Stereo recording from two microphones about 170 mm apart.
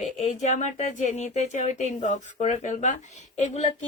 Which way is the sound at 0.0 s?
40° left (ahead or behind).